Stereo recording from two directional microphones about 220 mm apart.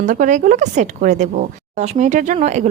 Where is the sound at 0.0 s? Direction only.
35° right (ahead or behind).